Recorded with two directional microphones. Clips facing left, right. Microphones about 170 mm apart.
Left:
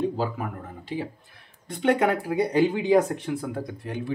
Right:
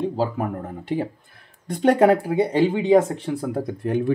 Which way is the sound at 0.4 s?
50° right (ahead or behind).